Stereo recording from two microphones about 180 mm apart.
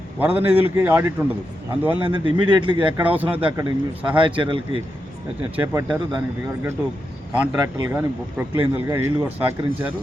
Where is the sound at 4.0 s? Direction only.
10° right (ahead or behind).